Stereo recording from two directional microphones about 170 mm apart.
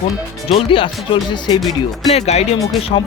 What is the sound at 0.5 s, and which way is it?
Speech, 30° left (ahead or behind).